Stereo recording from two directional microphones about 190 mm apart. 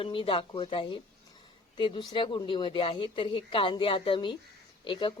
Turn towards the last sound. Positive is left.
turn(degrees=25)  # may be behind; listen again after turning